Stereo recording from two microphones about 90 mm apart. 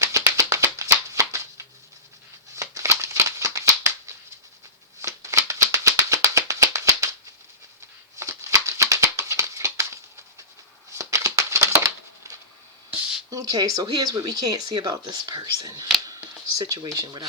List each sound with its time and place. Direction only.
0.0 s music: 35° right (ahead or behind)
2.6 s a sound: 35° right (ahead or behind)
5.0 s music: 35° right (ahead or behind)
8.2 s a sound: 35° right (ahead or behind)
13.3 s speech: 45° right (ahead or behind)
17.0 s speech: 55° right (ahead or behind)